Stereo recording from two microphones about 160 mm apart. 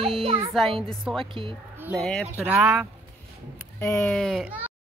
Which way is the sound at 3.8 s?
15° left (ahead or behind).